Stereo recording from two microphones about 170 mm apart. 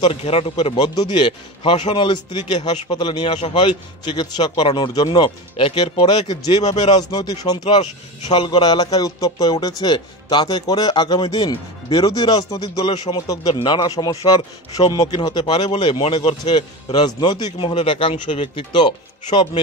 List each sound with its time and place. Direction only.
0.0 s a man's voice: 35° left (ahead or behind)
0.7 s speech: 25° left (ahead or behind)